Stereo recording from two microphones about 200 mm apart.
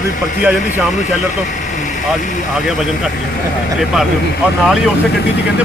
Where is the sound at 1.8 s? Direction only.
40° left (ahead or behind).